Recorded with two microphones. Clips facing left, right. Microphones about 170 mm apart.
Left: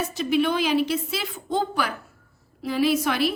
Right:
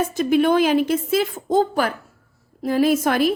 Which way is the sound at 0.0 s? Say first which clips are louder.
Right 5 dB; 50° right (ahead or behind).